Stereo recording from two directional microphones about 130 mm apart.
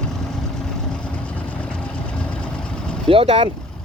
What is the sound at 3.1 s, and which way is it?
Vehicle, 45° right (ahead or behind).